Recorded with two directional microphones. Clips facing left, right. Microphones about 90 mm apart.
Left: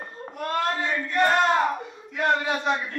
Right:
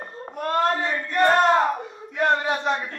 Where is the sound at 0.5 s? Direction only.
35° right (ahead or behind).